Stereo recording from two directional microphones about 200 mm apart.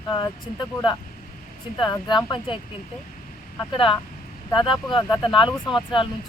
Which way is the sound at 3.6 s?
25° left (ahead or behind).